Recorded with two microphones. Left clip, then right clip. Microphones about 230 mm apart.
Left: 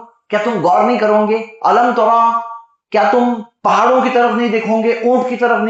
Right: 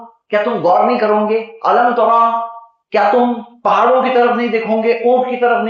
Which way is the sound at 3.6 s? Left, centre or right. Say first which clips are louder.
Even; left.